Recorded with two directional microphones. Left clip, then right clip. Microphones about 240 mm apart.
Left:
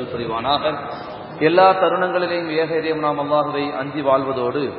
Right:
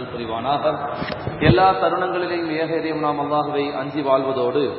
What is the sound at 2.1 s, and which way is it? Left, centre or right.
A man's voice, left.